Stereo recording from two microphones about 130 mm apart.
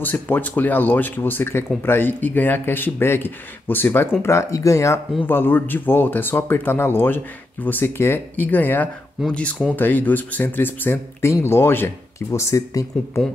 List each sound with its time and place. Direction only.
0.0 s speech: 15° left (ahead or behind)